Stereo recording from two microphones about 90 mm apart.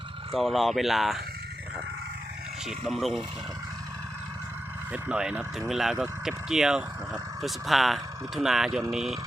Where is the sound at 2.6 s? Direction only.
Centre (ahead or behind).